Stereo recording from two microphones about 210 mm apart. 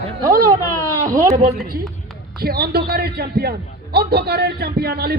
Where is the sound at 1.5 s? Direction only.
45° right (ahead or behind).